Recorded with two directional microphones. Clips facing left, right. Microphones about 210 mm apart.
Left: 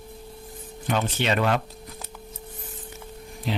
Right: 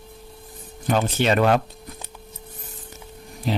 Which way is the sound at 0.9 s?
45° right (ahead or behind).